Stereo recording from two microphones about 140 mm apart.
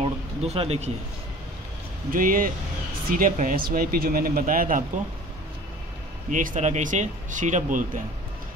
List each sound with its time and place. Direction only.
0.4 s speech: 45° right (ahead or behind)
2.0 s speech: 80° right
6.3 s speech: 65° right (ahead or behind)